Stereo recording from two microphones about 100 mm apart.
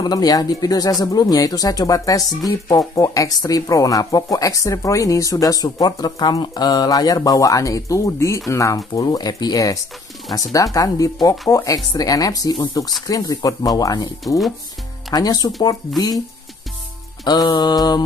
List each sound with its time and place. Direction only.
0.0 s speech: 40° left (ahead or behind)
12.8 s mantra: 40° left (ahead or behind)
13.1 s speech: 35° left (ahead or behind)
15.1 s speech: 40° left (ahead or behind)
17.2 s mantra: 45° left (ahead or behind)